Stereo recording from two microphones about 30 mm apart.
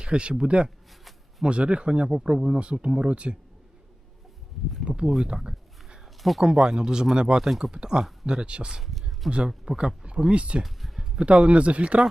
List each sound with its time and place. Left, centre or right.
0.0 s speech: right
2.0 s speech: right
3.0 s speech: right
4.9 s speech: right
5.3 s a sound: right
6.4 s speech: right
8.8 s speech: centre
9.6 s speech: right
10.3 s speech: right
10.8 s a sound: centre
11.2 s speech: right